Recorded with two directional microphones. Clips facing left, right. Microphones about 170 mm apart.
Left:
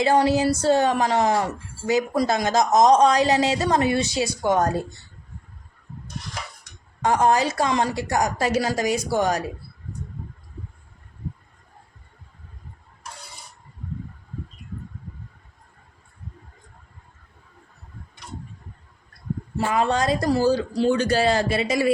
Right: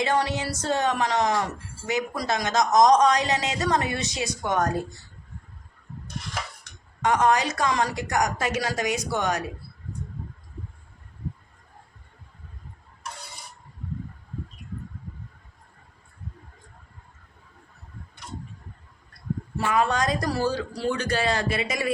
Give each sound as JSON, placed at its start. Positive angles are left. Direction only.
{"t": 0.0, "sound": "speech", "side_deg": 30}
{"t": 7.0, "sound": "speech", "side_deg": 30}
{"t": 19.5, "sound": "speech", "side_deg": 30}